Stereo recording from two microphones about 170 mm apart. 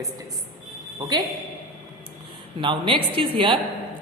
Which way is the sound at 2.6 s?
30° right (ahead or behind).